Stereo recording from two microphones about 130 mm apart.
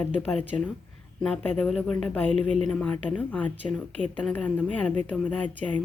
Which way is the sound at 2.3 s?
55° right (ahead or behind).